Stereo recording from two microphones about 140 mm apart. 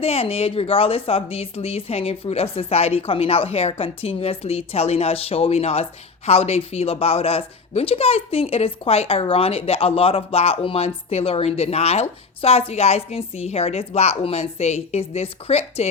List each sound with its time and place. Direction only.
0.0 s a woman's voice: 45° left (ahead or behind)